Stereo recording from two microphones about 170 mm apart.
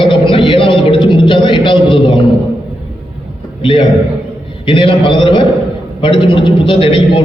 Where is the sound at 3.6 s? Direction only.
30° left (ahead or behind).